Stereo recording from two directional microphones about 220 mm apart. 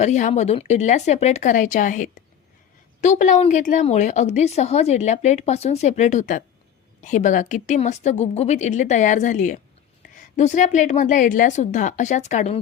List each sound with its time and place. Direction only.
0.0 s speech: 30° left (ahead or behind)